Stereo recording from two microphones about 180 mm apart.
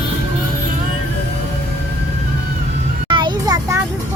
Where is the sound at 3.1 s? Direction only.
25° right (ahead or behind).